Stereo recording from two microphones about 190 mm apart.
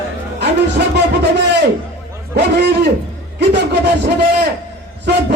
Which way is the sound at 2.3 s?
60° right (ahead or behind).